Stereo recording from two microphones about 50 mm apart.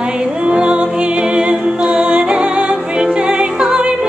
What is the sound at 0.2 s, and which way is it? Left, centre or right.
Music, centre.